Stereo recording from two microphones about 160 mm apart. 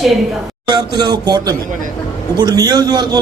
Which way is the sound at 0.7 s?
25° right (ahead or behind).